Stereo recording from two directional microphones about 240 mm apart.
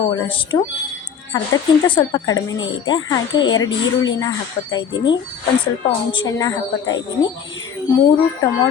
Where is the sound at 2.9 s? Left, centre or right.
Centre.